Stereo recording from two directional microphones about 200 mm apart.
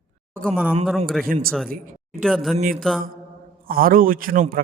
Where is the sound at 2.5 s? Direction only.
40° right (ahead or behind).